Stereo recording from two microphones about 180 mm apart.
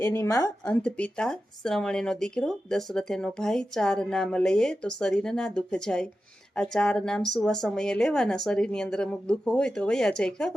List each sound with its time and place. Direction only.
0.0 s a woman's voice: 15° left (ahead or behind)
0.6 s speech: 5° left (ahead or behind)